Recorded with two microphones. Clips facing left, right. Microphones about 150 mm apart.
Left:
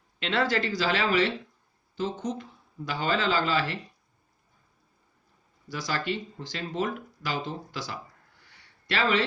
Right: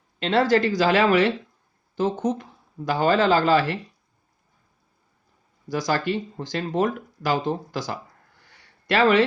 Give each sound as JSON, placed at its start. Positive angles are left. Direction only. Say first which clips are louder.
{"t": 0.2, "sound": "speech", "louder": "right 7 dB", "side_deg": -40}
{"t": 5.6, "sound": "speech", "louder": "right 7 dB", "side_deg": -45}